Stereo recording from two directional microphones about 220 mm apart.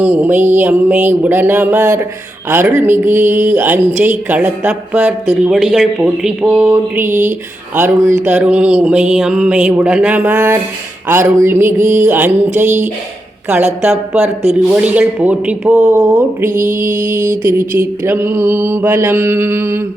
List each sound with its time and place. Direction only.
0.0 s speech: 5° right (ahead or behind)
14.1 s speech: 5° right (ahead or behind)
16.0 s speech: 15° right (ahead or behind)
16.5 s mantra: 35° right (ahead or behind)
17.7 s speech: 10° right (ahead or behind)